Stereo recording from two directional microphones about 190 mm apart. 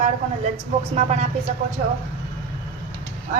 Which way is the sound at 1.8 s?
50° right (ahead or behind).